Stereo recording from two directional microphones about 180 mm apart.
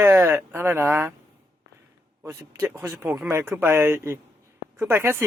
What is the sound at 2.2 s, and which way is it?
Speech, 15° right (ahead or behind).